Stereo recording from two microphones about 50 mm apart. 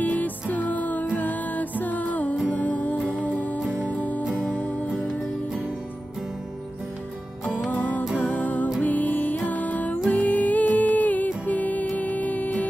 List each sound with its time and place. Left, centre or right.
0.0 s music: left
8.2 s music: left